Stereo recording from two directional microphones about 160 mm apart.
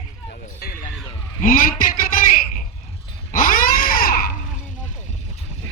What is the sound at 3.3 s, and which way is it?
Cat, 65° left (ahead or behind).